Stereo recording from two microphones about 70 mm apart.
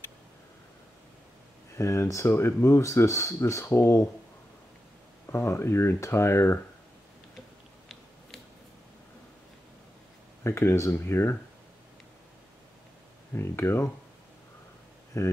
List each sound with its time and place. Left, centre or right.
1.8 s speech: left
5.3 s speech: left
10.4 s speech: left
13.3 s speech: left
15.2 s speech: left